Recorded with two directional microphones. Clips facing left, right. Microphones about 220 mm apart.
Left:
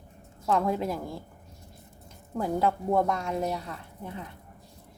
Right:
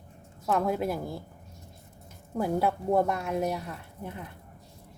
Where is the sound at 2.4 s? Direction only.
10° right (ahead or behind).